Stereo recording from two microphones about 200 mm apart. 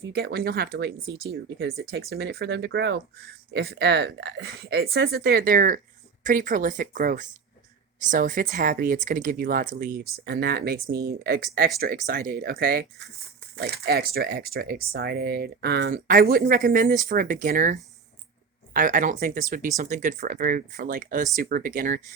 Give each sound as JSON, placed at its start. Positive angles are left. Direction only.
{"t": 0.1, "sound": "speech", "side_deg": -55}